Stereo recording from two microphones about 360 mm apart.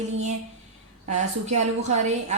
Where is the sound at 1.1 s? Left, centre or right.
Centre.